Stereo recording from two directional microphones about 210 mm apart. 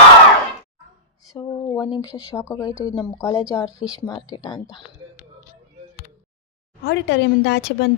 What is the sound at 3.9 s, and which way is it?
Speech, 20° left (ahead or behind).